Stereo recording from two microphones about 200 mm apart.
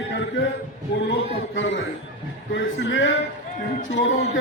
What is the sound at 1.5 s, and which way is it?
A man's voice, 65° left (ahead or behind).